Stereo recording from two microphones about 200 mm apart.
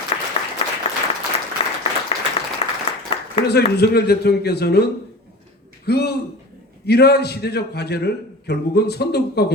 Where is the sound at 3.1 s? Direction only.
30° left (ahead or behind).